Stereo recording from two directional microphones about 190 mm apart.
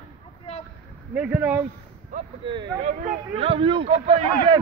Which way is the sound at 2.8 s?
45° right (ahead or behind).